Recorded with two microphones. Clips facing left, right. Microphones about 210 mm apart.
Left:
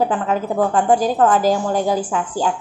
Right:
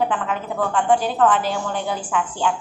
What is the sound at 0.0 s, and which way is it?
A woman's voice, 40° left (ahead or behind).